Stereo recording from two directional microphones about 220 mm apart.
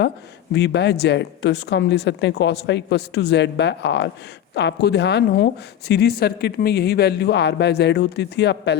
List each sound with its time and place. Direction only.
0.5 s a woman's voice: 50° left (ahead or behind)